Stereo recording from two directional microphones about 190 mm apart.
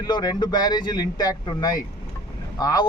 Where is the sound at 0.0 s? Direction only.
20° left (ahead or behind).